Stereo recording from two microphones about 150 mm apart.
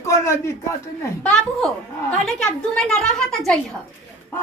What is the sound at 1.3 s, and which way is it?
Speech, 5° left (ahead or behind).